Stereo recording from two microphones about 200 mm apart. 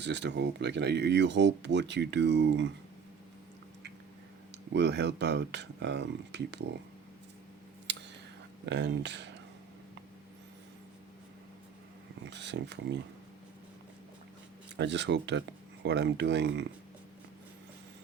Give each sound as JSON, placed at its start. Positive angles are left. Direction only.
{"t": 0.0, "sound": "speech", "side_deg": -60}
{"t": 4.7, "sound": "speech", "side_deg": -60}
{"t": 8.6, "sound": "speech", "side_deg": -60}
{"t": 12.2, "sound": "speech", "side_deg": -60}
{"t": 14.8, "sound": "speech", "side_deg": -60}